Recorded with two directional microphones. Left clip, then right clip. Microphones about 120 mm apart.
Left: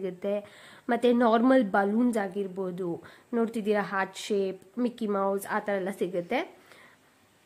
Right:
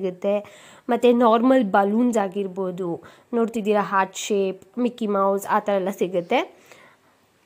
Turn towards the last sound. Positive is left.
turn(degrees=-35)  # may be behind; listen again after turning